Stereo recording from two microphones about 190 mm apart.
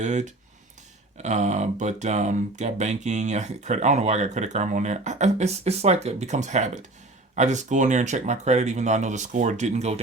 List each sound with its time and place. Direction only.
0.0 s speech: 40° right (ahead or behind)